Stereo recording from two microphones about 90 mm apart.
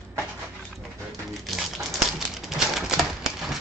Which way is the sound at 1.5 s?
Centre (ahead or behind).